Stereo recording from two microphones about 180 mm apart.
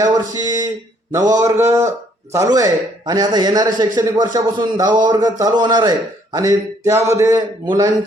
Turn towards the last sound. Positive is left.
turn(degrees=-20)  # may be behind; listen again after turning